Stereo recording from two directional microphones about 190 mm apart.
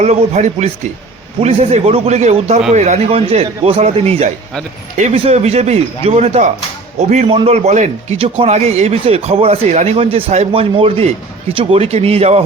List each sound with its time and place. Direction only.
0.0 s speech: 35° right (ahead or behind)